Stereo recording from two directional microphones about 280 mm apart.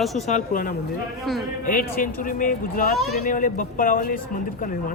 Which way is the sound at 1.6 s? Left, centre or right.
Left.